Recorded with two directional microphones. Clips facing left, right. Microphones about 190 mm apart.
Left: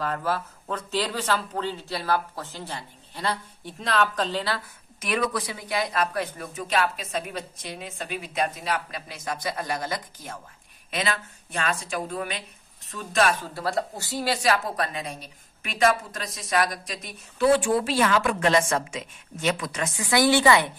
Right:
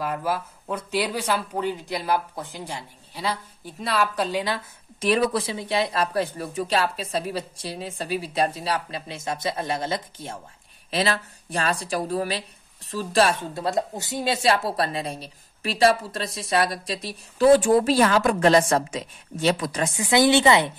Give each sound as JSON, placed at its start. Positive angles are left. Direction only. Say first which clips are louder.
{"t": 0.0, "sound": "speech", "louder": "right 1 dB", "side_deg": -10}
{"t": 5.0, "sound": "speech", "louder": "right 5 dB", "side_deg": -30}
{"t": 20.0, "sound": "a woman's voice", "louder": "right 2 dB", "side_deg": -20}